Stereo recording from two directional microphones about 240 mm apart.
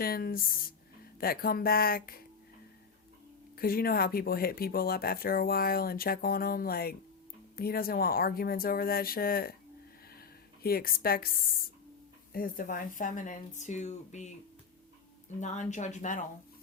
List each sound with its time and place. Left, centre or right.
0.0 s speech: left
3.5 s speech: left
10.2 s a sound: left
12.3 s speech: left
15.4 s speech: left